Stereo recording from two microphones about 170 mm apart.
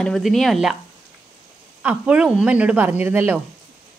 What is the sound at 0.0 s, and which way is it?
Speech, centre (ahead or behind).